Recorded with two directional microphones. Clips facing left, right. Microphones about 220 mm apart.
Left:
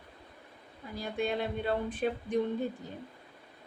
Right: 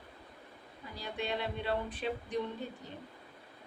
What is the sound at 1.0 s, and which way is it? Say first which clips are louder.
Music: left 5 dB; 50° left (ahead or behind).